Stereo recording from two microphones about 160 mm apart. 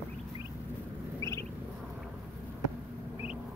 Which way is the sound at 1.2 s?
20° left (ahead or behind).